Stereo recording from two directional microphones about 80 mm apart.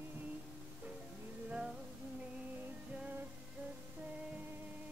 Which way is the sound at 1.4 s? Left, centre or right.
Centre.